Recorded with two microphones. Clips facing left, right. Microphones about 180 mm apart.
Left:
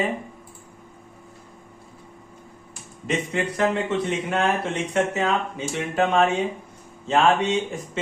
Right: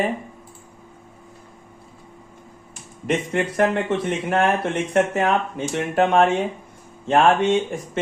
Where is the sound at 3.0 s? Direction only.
55° right (ahead or behind).